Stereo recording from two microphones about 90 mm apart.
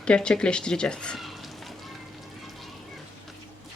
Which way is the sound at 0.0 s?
10° left (ahead or behind).